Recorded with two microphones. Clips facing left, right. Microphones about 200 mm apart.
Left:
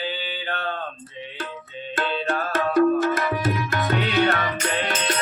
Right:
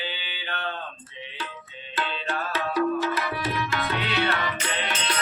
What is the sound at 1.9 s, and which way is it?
Tabla, 45° left (ahead or behind).